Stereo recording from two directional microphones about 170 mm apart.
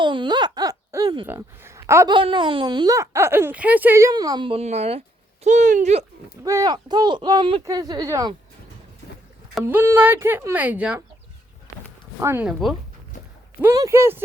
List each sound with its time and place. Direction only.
0.0 s a sound: 30° right (ahead or behind)
1.3 s speech: 15° right (ahead or behind)
2.1 s a child's voice: 30° right (ahead or behind)
6.4 s a child's voice: 20° right (ahead or behind)
9.6 s speech: 15° right (ahead or behind)
12.2 s speech: 15° right (ahead or behind)
12.5 s speech: centre (ahead or behind)
13.6 s speech: 15° right (ahead or behind)